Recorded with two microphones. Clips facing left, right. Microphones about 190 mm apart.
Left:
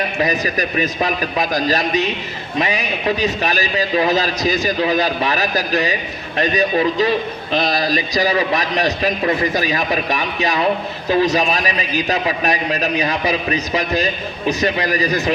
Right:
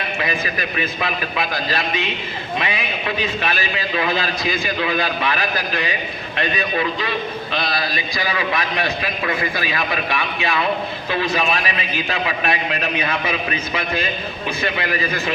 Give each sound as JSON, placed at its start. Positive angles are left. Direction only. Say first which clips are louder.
{"t": 0.2, "sound": "a man's voice", "louder": "left 5 dB", "side_deg": 40}